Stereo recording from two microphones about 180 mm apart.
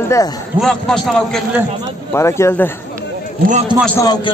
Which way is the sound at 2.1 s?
15° left (ahead or behind).